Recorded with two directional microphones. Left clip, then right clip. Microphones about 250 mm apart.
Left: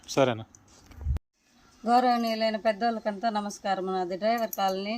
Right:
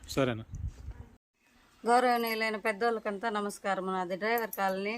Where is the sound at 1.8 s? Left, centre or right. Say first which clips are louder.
Left 3 dB; centre.